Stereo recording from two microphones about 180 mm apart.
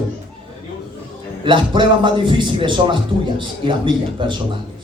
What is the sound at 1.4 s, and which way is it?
A man's voice, 25° right (ahead or behind).